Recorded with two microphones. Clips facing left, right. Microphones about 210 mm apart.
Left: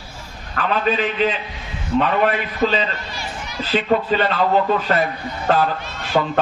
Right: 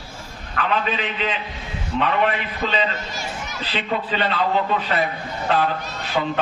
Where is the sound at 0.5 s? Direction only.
40° left (ahead or behind).